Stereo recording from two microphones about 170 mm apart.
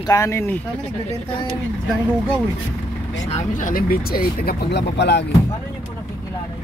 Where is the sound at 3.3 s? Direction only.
45° left (ahead or behind); by 5.2 s 85° left.